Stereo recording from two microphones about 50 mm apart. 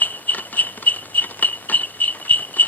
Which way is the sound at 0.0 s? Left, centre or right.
Left.